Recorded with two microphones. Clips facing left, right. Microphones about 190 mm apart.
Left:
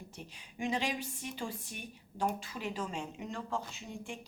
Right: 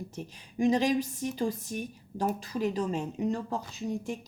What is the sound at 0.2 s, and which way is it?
A woman's voice, 40° right (ahead or behind).